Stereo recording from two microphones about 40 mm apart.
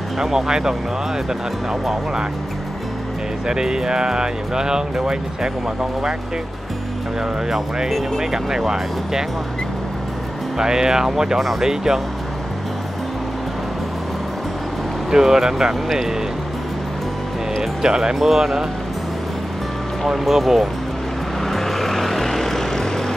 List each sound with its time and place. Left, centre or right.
0.2 s speech: centre
3.4 s speech: centre
8.2 s speech: centre
10.6 s speech: centre
15.0 s speech: centre
17.8 s speech: centre
20.1 s speech: centre
21.5 s vehicle: centre